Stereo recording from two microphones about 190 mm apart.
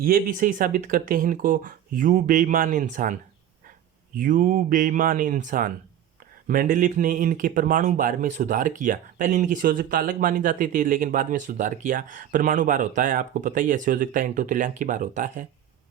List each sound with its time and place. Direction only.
0.0 s speech: 50° right (ahead or behind)